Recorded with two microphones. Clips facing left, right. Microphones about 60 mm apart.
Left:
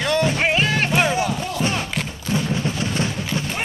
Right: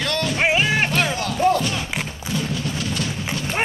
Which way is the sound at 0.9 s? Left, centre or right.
Centre.